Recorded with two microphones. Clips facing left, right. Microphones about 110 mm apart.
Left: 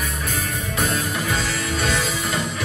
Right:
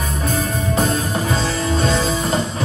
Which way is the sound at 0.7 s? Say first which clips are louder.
Right 4 dB; 35° right (ahead or behind).